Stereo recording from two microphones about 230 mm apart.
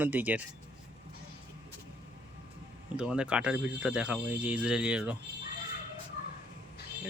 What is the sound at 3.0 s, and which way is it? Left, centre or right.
Speech, centre.